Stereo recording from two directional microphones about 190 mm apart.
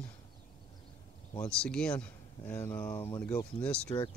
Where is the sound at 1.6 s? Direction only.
5° left (ahead or behind).